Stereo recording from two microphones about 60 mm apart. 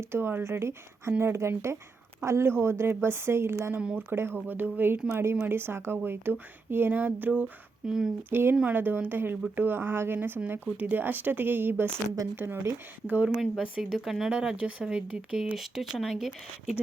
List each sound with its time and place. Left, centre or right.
0.0 s speech: right
5.0 s speech: right
6.7 s a sound: right
7.9 s speech: centre
8.3 s speech: right
13.9 s speech: centre
14.3 s speech: centre
15.5 s speech: centre